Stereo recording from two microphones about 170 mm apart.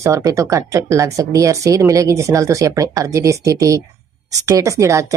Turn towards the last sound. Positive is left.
turn(degrees=-20)  # may be behind; listen again after turning